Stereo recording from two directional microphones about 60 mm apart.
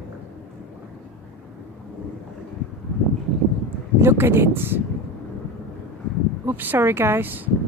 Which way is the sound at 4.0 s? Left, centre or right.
Right.